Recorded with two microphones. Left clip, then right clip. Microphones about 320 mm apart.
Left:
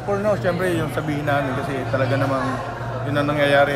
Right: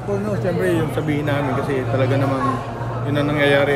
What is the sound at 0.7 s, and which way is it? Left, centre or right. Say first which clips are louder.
A man's voice: right 3 dB; centre.